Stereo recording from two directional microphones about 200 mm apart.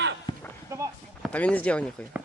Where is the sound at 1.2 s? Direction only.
5° left (ahead or behind).